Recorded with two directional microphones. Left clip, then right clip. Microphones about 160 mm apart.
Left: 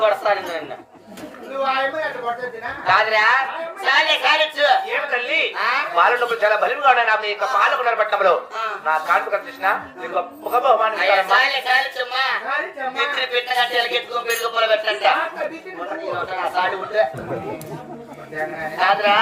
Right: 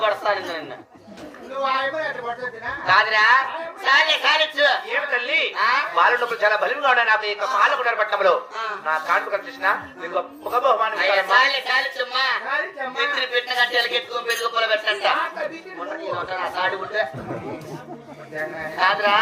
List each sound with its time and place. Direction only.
0.0 s a woman's voice: 30° right (ahead or behind)
2.8 s a woman's voice: 30° right (ahead or behind)
18.8 s a woman's voice: 30° right (ahead or behind)